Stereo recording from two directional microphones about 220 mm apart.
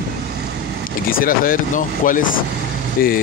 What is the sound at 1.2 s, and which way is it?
Speech, 40° left (ahead or behind).